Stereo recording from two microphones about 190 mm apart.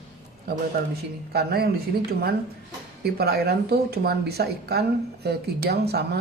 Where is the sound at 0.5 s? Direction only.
55° right (ahead or behind).